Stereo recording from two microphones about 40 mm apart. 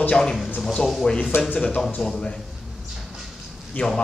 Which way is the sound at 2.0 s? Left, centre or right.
Centre.